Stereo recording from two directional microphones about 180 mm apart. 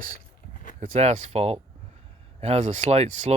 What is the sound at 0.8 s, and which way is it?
Speech, 40° right (ahead or behind).